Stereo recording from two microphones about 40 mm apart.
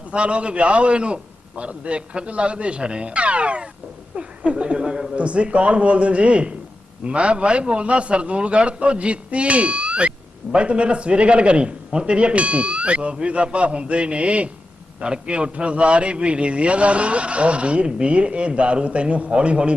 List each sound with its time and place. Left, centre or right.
0.1 s a man's voice: right